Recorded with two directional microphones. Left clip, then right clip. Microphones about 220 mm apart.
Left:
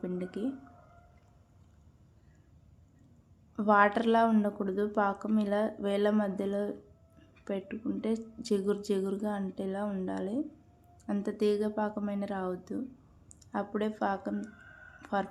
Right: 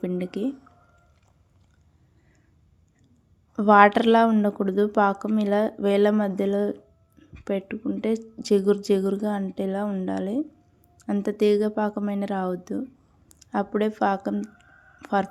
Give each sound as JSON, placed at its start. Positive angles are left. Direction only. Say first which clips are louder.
{"t": 0.0, "sound": "speech", "louder": "right 8 dB", "side_deg": -35}
{"t": 3.5, "sound": "a woman's voice", "louder": "right 9 dB", "side_deg": -30}